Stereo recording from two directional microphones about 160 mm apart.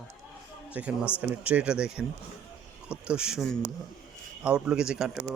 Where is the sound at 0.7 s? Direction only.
10° right (ahead or behind).